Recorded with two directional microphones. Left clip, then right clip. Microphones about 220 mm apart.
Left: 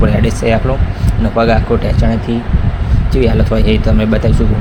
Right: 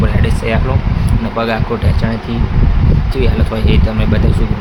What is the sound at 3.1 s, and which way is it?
Speech, 20° left (ahead or behind).